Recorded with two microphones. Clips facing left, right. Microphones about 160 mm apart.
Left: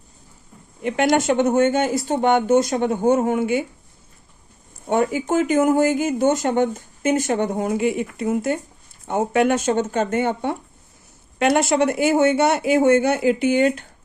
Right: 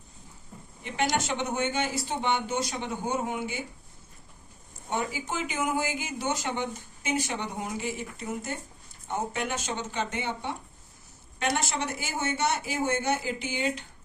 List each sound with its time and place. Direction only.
0.8 s speech: 60° left (ahead or behind)
4.9 s speech: 55° left (ahead or behind)
11.3 s speech: 65° left (ahead or behind)